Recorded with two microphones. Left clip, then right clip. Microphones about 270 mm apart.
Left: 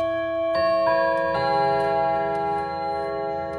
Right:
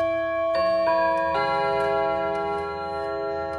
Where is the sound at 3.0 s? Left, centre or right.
Centre.